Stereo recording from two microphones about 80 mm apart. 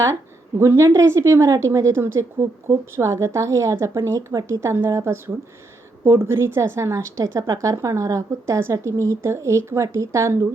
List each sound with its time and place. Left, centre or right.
0.6 s a woman's voice: right